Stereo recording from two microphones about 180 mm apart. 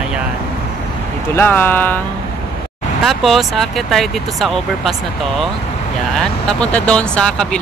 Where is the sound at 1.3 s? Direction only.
10° left (ahead or behind).